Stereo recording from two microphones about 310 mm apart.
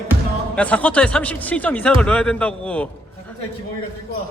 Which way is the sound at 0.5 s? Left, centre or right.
Centre.